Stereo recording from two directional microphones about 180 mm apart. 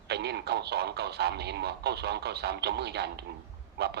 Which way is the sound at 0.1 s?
65° right (ahead or behind).